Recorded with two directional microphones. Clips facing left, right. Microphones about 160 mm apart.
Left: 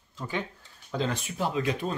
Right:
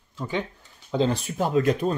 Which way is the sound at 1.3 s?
45° right (ahead or behind).